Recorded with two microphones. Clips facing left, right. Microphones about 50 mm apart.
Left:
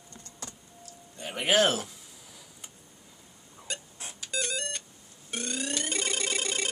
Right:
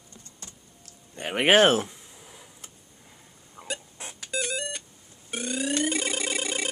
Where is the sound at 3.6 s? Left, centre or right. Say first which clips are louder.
Right 4 dB; right.